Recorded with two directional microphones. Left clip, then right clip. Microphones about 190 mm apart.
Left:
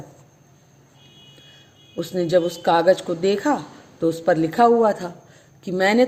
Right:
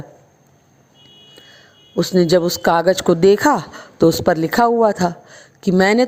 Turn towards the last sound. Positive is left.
turn(degrees=-50)  # may be behind; listen again after turning